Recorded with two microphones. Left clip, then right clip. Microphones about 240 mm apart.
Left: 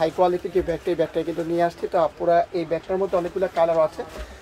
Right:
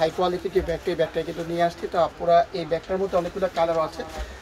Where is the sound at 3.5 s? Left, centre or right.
Left.